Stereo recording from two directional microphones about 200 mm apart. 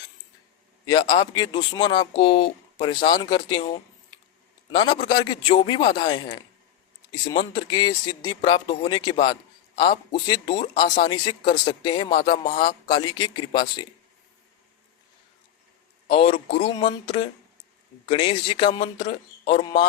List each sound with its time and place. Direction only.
0.9 s a man's voice: 20° left (ahead or behind)
12.3 s speech: 45° left (ahead or behind)
12.6 s speech: 20° left (ahead or behind)
16.0 s speech: 30° left (ahead or behind)